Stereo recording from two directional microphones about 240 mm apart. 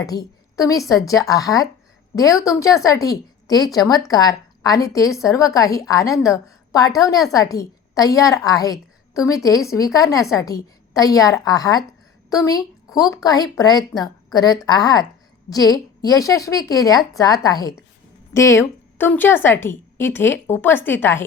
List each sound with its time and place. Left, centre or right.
0.0 s a woman's voice: centre